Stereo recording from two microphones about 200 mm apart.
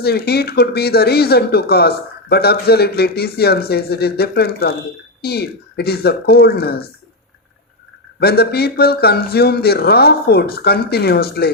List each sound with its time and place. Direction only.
0.0 s speech: 50° left (ahead or behind)
8.2 s speech: 50° left (ahead or behind)